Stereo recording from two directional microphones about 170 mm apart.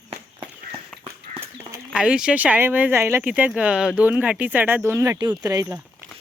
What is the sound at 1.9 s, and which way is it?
Speech, 5° right (ahead or behind).